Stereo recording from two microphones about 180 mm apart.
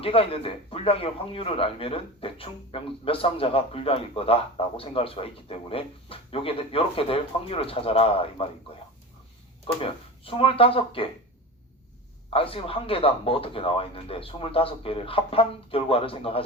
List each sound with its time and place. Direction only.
0.0 s a man's voice: 30° left (ahead or behind)
9.8 s a man's voice: 30° left (ahead or behind)
12.3 s a man's voice: 30° left (ahead or behind)